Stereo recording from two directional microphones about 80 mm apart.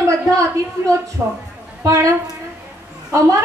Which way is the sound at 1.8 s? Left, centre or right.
Right.